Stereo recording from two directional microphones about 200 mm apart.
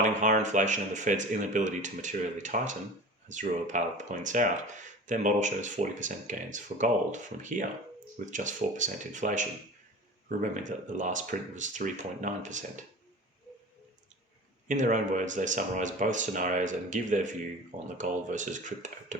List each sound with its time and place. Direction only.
0.0 s speech: 40° right (ahead or behind)
14.7 s speech: 40° right (ahead or behind)